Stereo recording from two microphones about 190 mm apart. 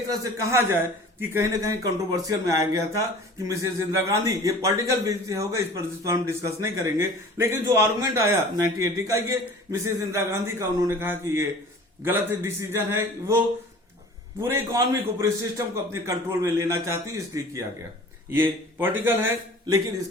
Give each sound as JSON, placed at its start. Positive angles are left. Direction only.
{"t": 0.1, "sound": "a man's voice", "side_deg": -15}